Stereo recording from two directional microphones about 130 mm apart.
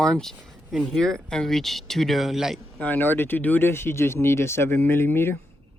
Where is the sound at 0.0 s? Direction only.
5° left (ahead or behind).